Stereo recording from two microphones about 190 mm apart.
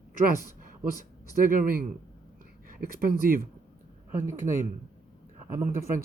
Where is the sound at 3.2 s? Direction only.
50° right (ahead or behind).